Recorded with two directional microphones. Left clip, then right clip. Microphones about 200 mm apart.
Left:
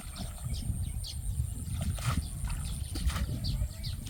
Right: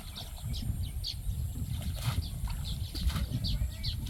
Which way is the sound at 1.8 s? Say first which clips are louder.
Left 3 dB; 5° left (ahead or behind).